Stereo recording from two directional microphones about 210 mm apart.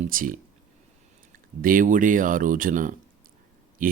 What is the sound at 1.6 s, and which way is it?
Speech, 40° right (ahead or behind).